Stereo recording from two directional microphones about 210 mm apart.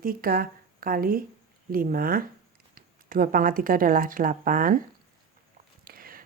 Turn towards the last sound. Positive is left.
turn(degrees=-45)  # may be behind; listen again after turning